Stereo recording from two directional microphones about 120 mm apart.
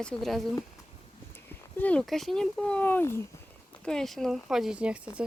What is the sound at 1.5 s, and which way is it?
Speech, 10° left (ahead or behind).